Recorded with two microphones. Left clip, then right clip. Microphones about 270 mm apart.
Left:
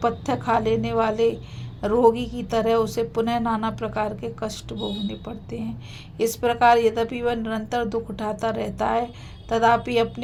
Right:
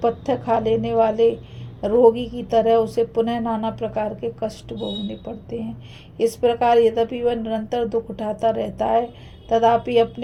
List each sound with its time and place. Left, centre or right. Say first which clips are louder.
0.0 s a woman's voice: right 3 dB; left